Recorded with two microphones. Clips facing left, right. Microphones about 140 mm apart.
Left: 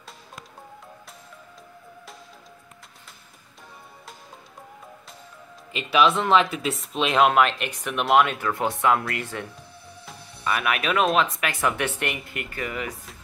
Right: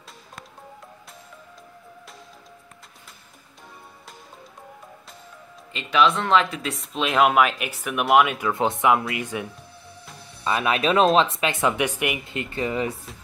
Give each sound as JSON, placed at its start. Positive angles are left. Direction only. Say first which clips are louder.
{"t": 5.7, "sound": "speech", "louder": "even", "side_deg": 5}
{"t": 8.5, "sound": "speech", "louder": "right 2 dB", "side_deg": -20}
{"t": 10.4, "sound": "speech", "louder": "right 3 dB", "side_deg": -25}
{"t": 12.3, "sound": "speech", "louder": "right 5 dB", "side_deg": -25}